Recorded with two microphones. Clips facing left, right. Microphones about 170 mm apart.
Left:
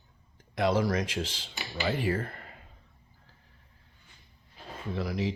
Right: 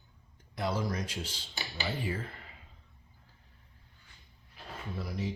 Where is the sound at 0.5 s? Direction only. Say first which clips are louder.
Left 7 dB; 90° left.